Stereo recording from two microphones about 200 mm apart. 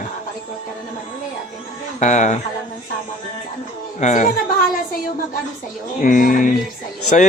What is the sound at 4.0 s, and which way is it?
Speech, 40° left (ahead or behind).